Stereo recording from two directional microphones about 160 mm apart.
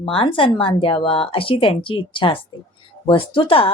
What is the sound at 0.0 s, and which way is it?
A woman's voice, 35° left (ahead or behind).